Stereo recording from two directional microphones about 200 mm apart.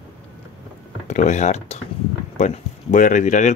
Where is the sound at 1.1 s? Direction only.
35° left (ahead or behind).